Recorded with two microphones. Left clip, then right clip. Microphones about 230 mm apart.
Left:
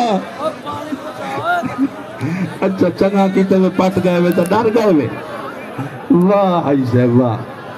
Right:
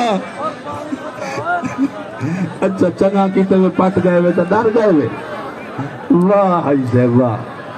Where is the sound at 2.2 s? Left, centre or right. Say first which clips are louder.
Even; centre; by 4.3 s left.